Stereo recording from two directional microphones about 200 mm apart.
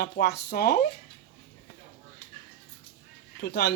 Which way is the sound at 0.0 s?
55° left (ahead or behind).